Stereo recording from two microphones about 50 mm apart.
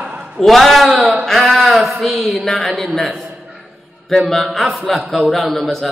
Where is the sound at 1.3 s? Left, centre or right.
Centre.